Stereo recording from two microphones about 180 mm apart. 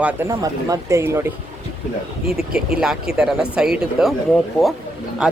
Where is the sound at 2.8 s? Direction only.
5° right (ahead or behind).